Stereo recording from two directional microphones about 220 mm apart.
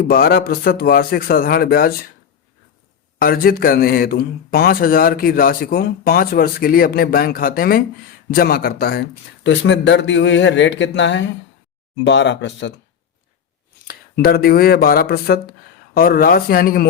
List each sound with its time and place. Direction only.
0.0 s speech: 45° left (ahead or behind)
3.2 s speech: 40° left (ahead or behind)
13.8 s speech: 45° left (ahead or behind)